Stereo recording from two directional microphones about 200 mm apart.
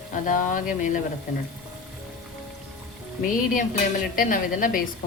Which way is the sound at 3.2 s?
40° left (ahead or behind).